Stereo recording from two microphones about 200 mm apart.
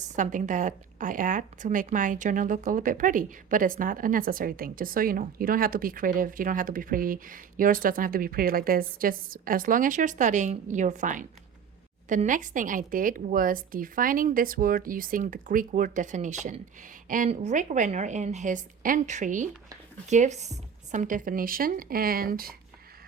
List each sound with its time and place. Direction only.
0.2 s a woman's voice: 40° right (ahead or behind)